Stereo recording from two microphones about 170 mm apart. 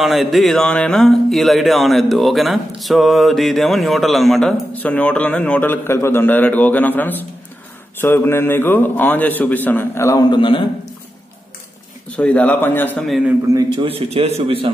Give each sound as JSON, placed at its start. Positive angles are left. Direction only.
{"t": 0.0, "sound": "a man's voice", "side_deg": 0}
{"t": 12.2, "sound": "a man's voice", "side_deg": 10}
{"t": 13.5, "sound": "a man's voice", "side_deg": -20}
{"t": 13.8, "sound": "a man's voice", "side_deg": -35}